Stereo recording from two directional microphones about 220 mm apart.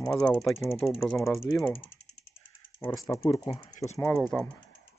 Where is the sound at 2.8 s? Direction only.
15° left (ahead or behind).